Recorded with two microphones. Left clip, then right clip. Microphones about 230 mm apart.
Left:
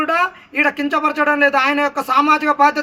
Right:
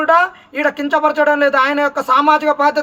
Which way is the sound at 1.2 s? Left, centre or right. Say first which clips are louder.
Right 1 dB; right.